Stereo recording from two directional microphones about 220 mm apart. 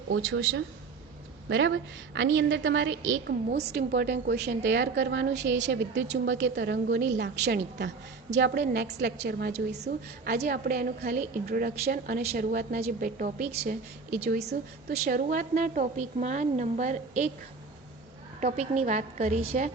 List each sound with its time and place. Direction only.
0.1 s a woman's voice: 65° right (ahead or behind); by 17.3 s 35° right (ahead or behind)
18.3 s a woman's voice: 30° right (ahead or behind)